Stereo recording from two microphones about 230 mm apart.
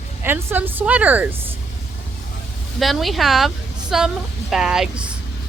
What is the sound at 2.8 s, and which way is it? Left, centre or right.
A woman's voice, centre.